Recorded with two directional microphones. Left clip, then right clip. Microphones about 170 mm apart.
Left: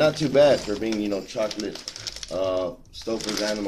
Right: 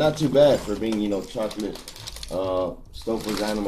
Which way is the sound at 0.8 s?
Centre (ahead or behind).